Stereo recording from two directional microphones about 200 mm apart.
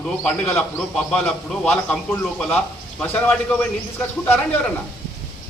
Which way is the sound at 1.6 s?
5° left (ahead or behind).